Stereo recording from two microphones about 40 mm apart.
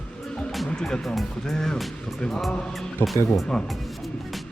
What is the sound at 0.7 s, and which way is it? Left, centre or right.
A man's voice, left.